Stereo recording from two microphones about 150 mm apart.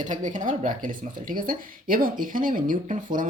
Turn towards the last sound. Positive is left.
turn(degrees=-60)  # may be behind; listen again after turning